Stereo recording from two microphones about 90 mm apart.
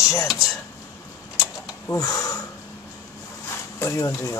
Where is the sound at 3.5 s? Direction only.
35° left (ahead or behind).